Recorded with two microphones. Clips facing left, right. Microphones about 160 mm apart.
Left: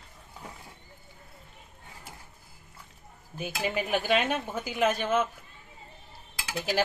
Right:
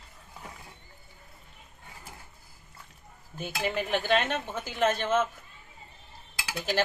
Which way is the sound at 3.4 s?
10° left (ahead or behind).